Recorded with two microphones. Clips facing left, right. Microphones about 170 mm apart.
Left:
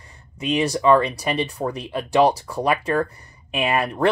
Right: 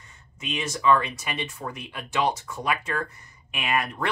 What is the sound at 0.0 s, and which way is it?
Speech, 35° left (ahead or behind).